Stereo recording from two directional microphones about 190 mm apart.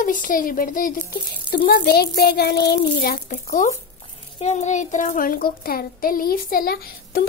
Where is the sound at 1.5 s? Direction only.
55° left (ahead or behind); by 3.7 s 40° left (ahead or behind).